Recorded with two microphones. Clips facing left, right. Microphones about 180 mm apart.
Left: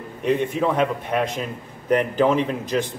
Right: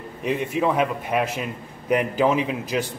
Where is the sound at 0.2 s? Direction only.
5° right (ahead or behind).